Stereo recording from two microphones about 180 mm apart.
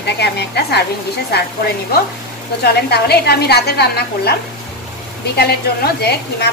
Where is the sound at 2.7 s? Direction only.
60° left (ahead or behind).